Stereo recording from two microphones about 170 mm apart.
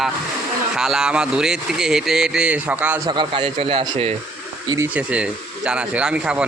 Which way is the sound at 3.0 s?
25° right (ahead or behind).